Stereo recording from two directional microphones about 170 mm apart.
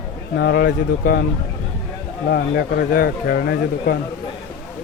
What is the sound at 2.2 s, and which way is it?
Speech, 75° left (ahead or behind).